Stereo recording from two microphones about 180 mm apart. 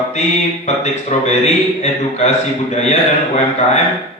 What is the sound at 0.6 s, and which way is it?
A man's voice, 40° left (ahead or behind).